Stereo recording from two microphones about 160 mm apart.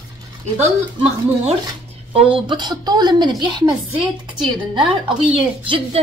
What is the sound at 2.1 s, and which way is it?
A woman's voice, 30° right (ahead or behind).